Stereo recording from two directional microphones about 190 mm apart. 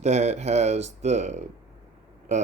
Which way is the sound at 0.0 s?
35° right (ahead or behind).